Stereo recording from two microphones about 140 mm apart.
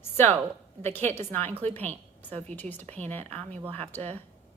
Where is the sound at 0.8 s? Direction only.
15° left (ahead or behind).